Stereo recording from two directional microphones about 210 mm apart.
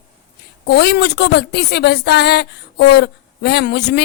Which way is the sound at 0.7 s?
55° left (ahead or behind).